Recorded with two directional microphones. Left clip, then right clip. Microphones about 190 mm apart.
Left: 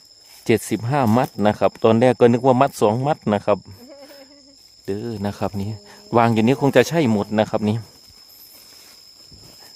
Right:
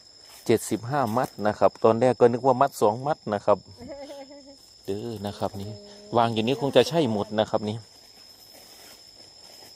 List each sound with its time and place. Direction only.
0.7 s speech: 30° left (ahead or behind)
4.9 s speech: 35° left (ahead or behind)